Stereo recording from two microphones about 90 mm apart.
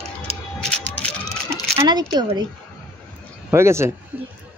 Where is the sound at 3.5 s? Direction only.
30° right (ahead or behind).